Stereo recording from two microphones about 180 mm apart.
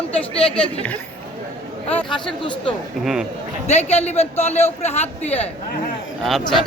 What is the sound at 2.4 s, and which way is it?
Speech, 30° left (ahead or behind).